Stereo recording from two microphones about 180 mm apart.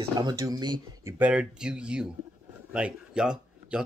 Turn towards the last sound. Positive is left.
turn(degrees=-5)  # may be behind; listen again after turning